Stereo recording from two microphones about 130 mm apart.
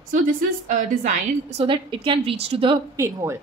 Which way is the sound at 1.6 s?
45° right (ahead or behind).